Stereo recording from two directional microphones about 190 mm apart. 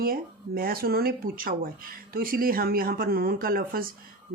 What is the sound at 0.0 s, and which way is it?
Speech, 50° right (ahead or behind).